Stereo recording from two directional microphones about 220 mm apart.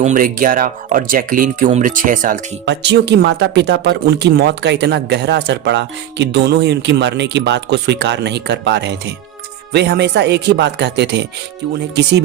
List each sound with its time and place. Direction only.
0.0 s speech: 35° right (ahead or behind)